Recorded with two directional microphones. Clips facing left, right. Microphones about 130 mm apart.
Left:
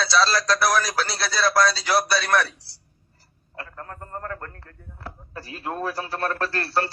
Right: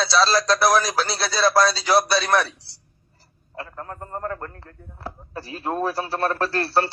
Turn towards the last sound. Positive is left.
turn(degrees=-30)  # may be behind; listen again after turning